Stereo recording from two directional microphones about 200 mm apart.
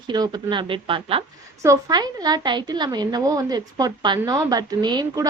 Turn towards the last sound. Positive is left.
turn(degrees=-20)  # may be behind; listen again after turning